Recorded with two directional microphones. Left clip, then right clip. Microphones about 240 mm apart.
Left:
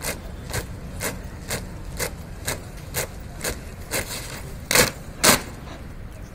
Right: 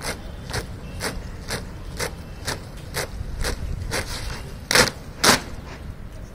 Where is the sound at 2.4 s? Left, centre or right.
Centre.